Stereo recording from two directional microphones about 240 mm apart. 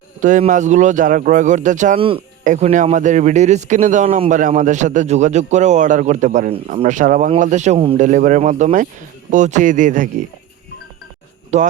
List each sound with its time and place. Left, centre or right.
0.2 s speech: right
11.5 s speech: right